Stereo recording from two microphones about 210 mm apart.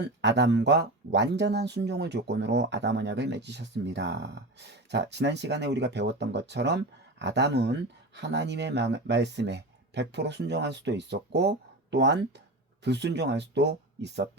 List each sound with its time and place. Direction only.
0.0 s speech: 55° right (ahead or behind)